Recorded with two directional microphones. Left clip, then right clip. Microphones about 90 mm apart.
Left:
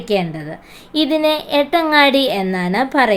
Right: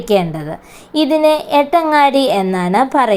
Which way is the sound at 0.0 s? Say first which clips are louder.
Right 4 dB; 40° right (ahead or behind).